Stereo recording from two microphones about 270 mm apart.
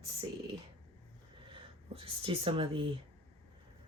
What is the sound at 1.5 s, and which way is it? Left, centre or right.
Speech, centre.